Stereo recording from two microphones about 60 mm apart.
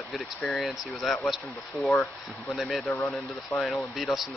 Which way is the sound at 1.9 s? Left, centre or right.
Left.